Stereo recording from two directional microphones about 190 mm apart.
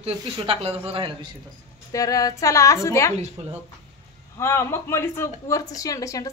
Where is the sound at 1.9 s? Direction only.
20° left (ahead or behind).